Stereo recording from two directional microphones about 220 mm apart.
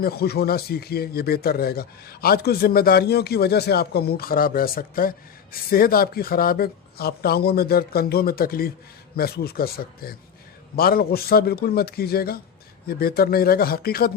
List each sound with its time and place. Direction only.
0.0 s speech: 45° left (ahead or behind)